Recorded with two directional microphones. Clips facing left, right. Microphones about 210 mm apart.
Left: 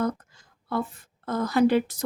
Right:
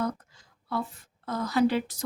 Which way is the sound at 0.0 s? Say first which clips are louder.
Left 3 dB; 50° left (ahead or behind).